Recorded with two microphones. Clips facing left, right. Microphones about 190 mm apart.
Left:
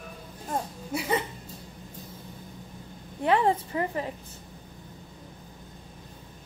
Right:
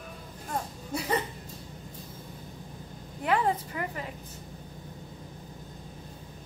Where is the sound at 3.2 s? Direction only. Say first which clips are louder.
Left 3 dB; 25° left (ahead or behind).